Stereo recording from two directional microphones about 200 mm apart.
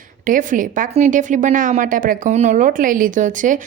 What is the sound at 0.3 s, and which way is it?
A woman's voice, 40° right (ahead or behind).